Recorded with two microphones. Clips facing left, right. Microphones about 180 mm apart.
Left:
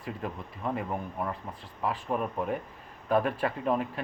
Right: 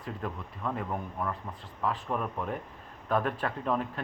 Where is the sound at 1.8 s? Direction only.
10° left (ahead or behind).